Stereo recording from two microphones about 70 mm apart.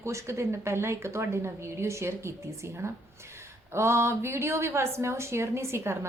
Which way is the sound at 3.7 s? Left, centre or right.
Right.